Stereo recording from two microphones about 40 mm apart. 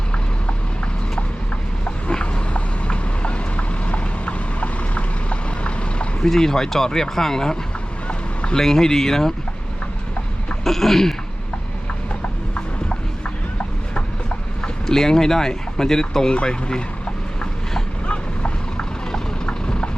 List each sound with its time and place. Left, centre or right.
2.0 s vehicle: left
6.2 s speech: centre
8.0 s vehicle: left
8.5 s speech: centre
10.6 s speech: centre
14.6 s speech: centre
18.0 s vehicle: left